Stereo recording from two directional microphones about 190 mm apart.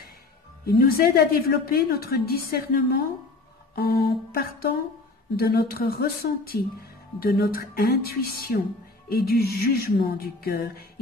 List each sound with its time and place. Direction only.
0.7 s a woman's voice: 50° left (ahead or behind)
3.7 s mantra: 60° left (ahead or behind)
5.3 s a woman's voice: 55° left (ahead or behind)